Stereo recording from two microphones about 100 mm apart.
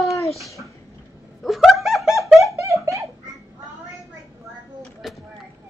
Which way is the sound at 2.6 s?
30° right (ahead or behind).